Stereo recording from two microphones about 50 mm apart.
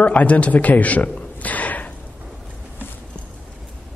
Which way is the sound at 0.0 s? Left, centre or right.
Left.